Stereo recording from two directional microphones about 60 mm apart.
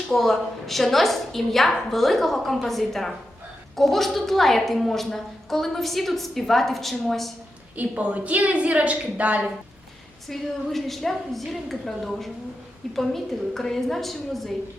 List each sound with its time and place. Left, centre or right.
0.1 s a woman's voice: centre
7.8 s a woman's voice: right
10.2 s a woman's voice: centre